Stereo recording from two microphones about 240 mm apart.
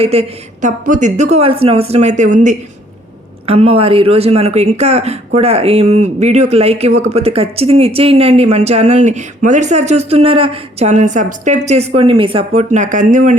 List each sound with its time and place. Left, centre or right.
0.0 s speech: right